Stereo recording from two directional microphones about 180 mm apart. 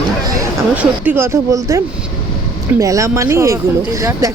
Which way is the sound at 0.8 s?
10° right (ahead or behind).